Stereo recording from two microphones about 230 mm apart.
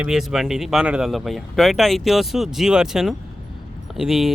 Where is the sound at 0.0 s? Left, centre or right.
Centre.